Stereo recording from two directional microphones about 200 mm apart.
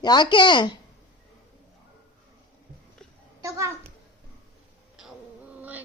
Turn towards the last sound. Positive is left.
turn(degrees=-10)  # may be behind; listen again after turning